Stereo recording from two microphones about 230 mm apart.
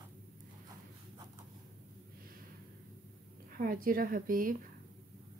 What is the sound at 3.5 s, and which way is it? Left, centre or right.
A woman's voice, right.